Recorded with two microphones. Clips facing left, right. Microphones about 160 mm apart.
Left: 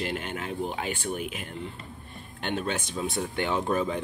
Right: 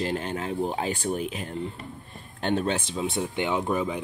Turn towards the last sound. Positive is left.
turn(degrees=-15)  # may be behind; listen again after turning